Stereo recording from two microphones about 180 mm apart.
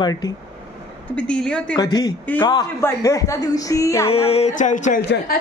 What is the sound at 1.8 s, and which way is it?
Speech, 20° left (ahead or behind).